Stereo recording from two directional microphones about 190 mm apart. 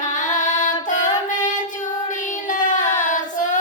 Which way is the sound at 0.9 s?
40° left (ahead or behind).